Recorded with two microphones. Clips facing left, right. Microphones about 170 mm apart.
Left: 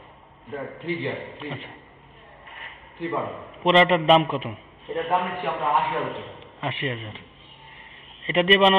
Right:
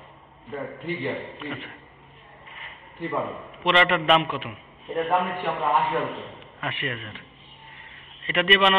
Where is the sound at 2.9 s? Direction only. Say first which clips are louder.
Even; centre (ahead or behind).